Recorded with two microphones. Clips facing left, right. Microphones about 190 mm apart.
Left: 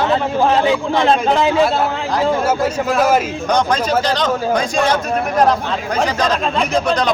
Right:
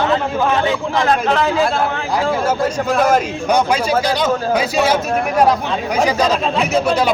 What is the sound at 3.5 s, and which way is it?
Speech, 10° right (ahead or behind).